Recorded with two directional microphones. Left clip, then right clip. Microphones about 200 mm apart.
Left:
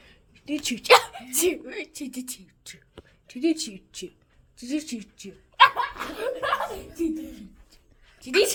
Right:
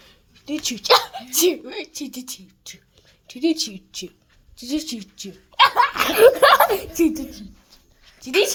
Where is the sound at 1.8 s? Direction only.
Centre (ahead or behind).